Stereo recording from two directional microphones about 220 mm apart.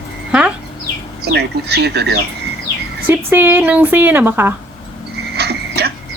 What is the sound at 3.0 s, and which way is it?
A woman's voice, 10° right (ahead or behind).